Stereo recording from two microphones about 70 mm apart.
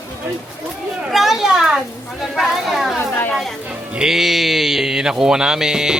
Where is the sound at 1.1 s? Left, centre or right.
Centre.